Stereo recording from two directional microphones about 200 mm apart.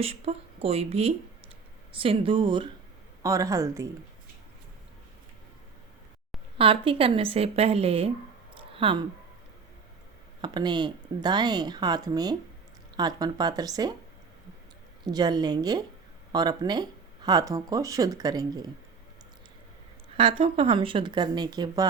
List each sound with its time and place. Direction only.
0.0 s a woman's voice: 30° right (ahead or behind)
6.6 s speech: 25° right (ahead or behind)
10.4 s speech: 20° right (ahead or behind)
15.0 s speech: 20° right (ahead or behind)
20.1 s speech: 25° right (ahead or behind)